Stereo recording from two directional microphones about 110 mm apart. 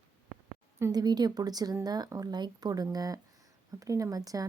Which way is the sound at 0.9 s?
40° right (ahead or behind).